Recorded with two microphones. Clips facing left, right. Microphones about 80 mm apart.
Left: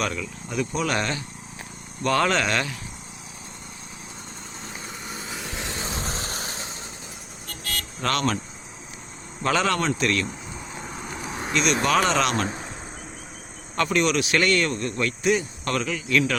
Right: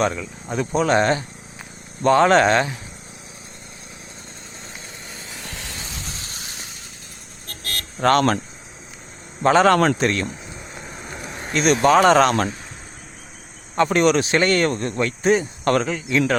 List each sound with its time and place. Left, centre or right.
0.0 s speech: right
5.5 s vehicle: left
8.0 s speech: right
9.4 s speech: right
9.7 s a man's voice: right
10.0 s speech: right
10.8 s vehicle: centre
11.5 s speech: right
13.7 s speech: right